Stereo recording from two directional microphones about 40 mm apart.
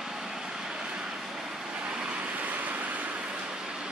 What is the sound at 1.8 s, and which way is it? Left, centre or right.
Vehicle, right.